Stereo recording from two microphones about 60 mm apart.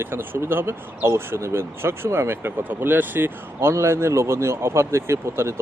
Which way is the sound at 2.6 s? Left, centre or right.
Right.